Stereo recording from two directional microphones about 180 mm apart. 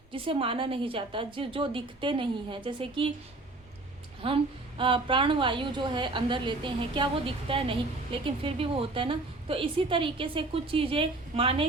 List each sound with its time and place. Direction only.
0.1 s a woman's voice: 30° right (ahead or behind)
4.2 s a woman's voice: 30° right (ahead or behind)